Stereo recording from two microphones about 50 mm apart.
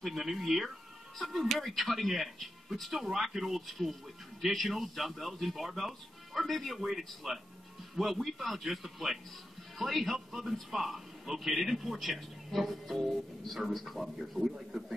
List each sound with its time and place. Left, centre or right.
0.0 s a man's voice: centre